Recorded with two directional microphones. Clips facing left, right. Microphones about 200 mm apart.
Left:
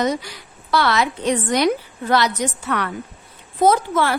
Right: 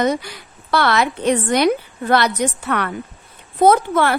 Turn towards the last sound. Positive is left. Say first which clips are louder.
# right 3 dB
turn(degrees=-60)  # may be behind; listen again after turning